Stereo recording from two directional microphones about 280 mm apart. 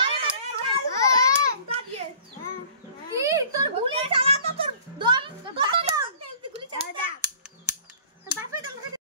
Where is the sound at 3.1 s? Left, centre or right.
Centre.